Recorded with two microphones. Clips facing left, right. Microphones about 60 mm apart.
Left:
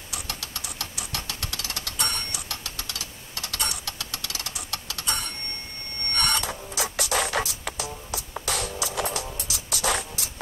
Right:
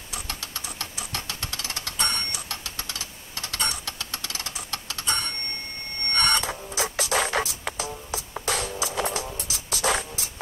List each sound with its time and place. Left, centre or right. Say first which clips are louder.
0.1 s a sound: right 1 dB; centre
2.0 s clock: right 2 dB; centre
3.3 s a sound: right 2 dB; centre
6.1 s printer: right 2 dB; centre
7.2 s music: right 1 dB; right
8.4 s music: right 2 dB; centre